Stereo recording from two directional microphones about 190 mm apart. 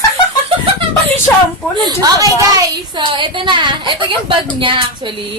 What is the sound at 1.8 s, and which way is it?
Speech, 20° right (ahead or behind).